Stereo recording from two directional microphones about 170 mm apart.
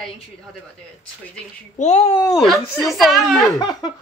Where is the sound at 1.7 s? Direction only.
40° left (ahead or behind).